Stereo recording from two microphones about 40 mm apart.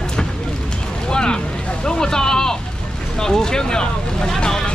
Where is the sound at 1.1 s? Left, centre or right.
Centre.